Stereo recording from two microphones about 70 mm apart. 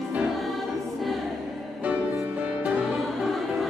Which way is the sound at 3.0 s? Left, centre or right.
Centre.